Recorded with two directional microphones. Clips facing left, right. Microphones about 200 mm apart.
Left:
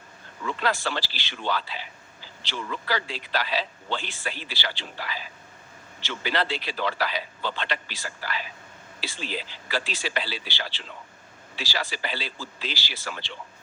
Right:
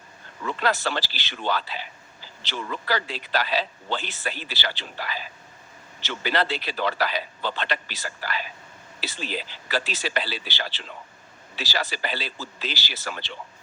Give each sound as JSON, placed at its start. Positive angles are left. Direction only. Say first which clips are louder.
{"t": 0.4, "sound": "speech", "louder": "right 2 dB", "side_deg": -40}